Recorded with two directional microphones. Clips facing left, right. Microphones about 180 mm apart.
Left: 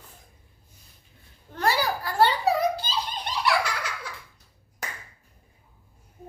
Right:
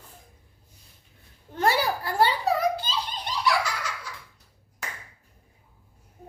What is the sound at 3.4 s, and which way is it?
Baby laughter, 60° left (ahead or behind).